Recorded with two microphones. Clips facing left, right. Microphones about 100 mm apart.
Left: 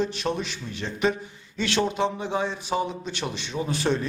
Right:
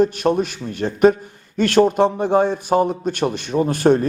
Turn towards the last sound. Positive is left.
turn(degrees=-50)  # may be behind; listen again after turning